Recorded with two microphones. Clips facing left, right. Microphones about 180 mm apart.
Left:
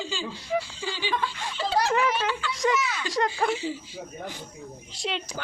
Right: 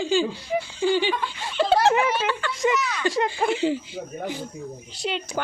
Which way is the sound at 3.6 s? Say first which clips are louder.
Right 8 dB; 65° right (ahead or behind).